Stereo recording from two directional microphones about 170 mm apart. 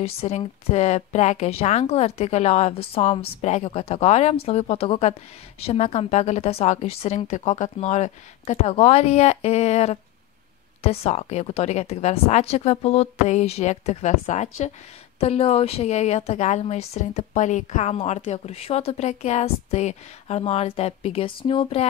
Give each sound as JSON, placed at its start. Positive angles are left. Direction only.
{"t": 0.0, "sound": "speech", "side_deg": 35}